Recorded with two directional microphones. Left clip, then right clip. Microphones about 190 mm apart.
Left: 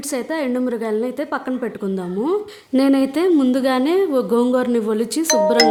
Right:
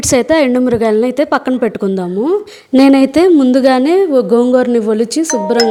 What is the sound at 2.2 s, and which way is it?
Speech, 20° right (ahead or behind).